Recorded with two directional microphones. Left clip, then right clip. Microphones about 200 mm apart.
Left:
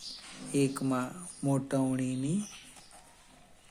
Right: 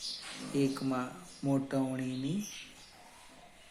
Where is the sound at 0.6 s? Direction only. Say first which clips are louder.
Left 3 dB; 50° left (ahead or behind).